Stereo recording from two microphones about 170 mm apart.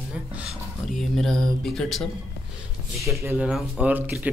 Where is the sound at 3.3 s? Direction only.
5° right (ahead or behind).